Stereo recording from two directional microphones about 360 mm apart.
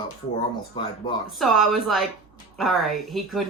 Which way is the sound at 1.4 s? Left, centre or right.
Centre.